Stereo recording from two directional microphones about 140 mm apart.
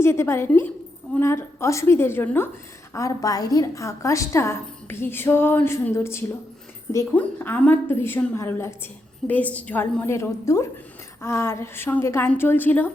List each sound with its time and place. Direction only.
0.0 s a woman's voice: 20° left (ahead or behind)